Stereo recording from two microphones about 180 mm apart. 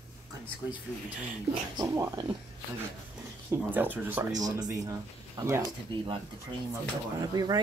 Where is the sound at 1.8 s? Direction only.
20° right (ahead or behind).